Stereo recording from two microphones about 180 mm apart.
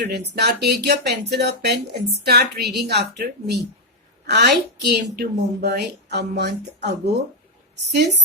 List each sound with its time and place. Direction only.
0.3 s a woman's voice: 65° right (ahead or behind)